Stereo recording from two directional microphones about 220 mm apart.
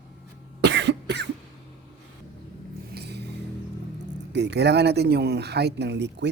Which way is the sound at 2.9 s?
50° right (ahead or behind).